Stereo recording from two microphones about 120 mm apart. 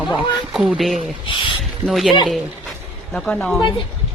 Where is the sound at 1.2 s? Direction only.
45° left (ahead or behind).